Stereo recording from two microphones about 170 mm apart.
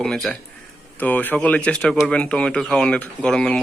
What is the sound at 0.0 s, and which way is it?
Speech, 5° left (ahead or behind).